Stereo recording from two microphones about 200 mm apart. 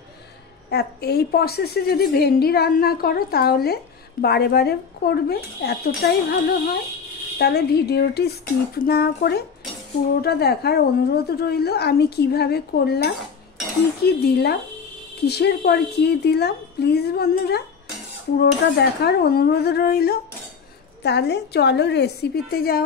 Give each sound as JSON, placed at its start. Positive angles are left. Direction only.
{"t": 0.7, "sound": "a woman's voice", "side_deg": 55}